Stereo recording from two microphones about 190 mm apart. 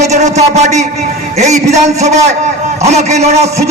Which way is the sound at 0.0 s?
35° right (ahead or behind).